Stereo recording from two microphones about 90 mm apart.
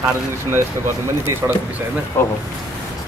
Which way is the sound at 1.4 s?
20° right (ahead or behind).